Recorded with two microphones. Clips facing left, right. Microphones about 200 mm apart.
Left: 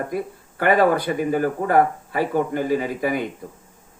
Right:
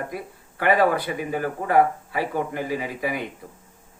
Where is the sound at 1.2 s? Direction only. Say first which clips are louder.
Left 6 dB; 45° left (ahead or behind).